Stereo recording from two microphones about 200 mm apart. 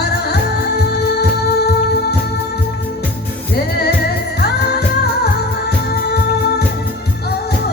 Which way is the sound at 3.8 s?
55° left (ahead or behind).